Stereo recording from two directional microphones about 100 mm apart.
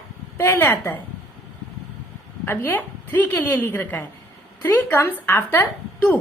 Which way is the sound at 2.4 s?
20° left (ahead or behind).